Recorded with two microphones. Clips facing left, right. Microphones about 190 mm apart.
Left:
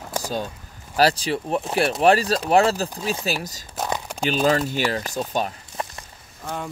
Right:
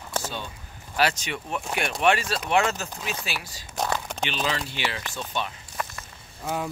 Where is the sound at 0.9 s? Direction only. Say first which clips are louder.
Left 6 dB; 35° left (ahead or behind).